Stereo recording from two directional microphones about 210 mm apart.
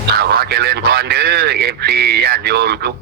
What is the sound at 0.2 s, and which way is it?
Speech, 50° right (ahead or behind).